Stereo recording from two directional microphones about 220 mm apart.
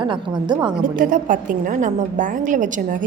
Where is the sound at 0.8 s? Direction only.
40° right (ahead or behind).